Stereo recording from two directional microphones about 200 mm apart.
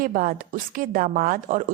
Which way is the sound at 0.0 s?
45° right (ahead or behind).